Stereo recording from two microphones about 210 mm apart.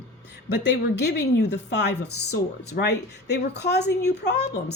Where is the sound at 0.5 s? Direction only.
55° left (ahead or behind).